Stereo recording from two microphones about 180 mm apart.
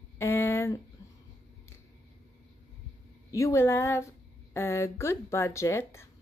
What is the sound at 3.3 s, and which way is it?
A woman's voice, 15° left (ahead or behind).